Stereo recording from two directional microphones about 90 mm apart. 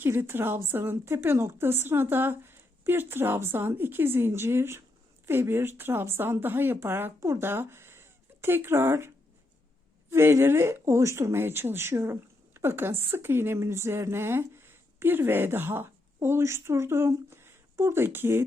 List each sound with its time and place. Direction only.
0.0 s a woman's voice: 25° right (ahead or behind)